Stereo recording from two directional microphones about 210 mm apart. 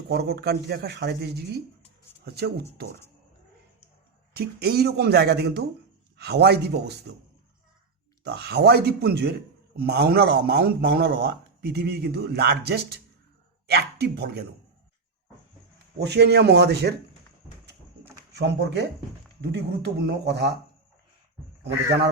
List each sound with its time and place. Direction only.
0.1 s speech: 50° right (ahead or behind)
4.4 s speech: 50° right (ahead or behind)
8.2 s speech: 50° right (ahead or behind)
16.0 s speech: 55° right (ahead or behind)
18.3 s speech: 55° right (ahead or behind)